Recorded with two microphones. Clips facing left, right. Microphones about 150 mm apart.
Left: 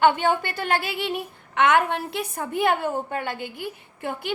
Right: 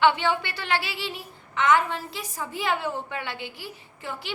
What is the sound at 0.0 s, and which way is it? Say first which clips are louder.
A woman's voice: left 2 dB; 50° left (ahead or behind).